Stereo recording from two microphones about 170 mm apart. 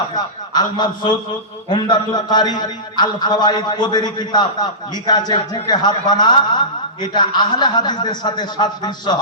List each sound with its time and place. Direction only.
0.1 s a man's voice: 25° left (ahead or behind)